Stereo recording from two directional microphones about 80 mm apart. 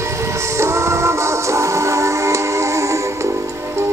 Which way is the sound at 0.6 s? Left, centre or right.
Right.